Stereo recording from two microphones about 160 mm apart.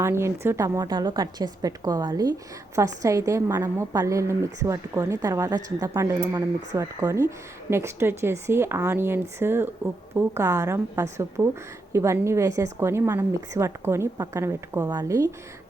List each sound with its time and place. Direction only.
0.0 s a woman's voice: 15° right (ahead or behind)